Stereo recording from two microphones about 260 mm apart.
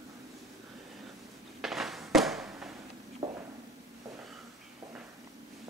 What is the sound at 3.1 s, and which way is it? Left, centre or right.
Walk, right.